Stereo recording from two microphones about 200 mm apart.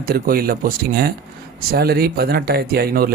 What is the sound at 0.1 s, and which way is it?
Speech, 45° right (ahead or behind).